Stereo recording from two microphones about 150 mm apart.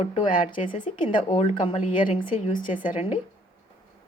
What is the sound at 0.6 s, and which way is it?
Speech, 60° left (ahead or behind).